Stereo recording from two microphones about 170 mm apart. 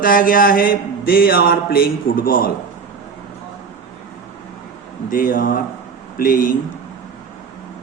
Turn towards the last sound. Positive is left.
turn(degrees=55)  # may be behind; listen again after turning